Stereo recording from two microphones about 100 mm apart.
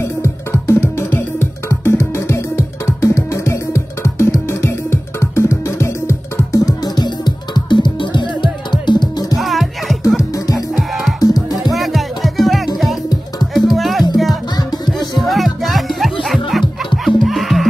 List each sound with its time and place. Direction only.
0.0 s music: 30° left (ahead or behind); by 9.4 s 50° left (ahead or behind)
9.4 s music: centre (ahead or behind)
10.3 s music: 35° left (ahead or behind)
10.8 s music: centre (ahead or behind)
15.2 s music: centre (ahead or behind)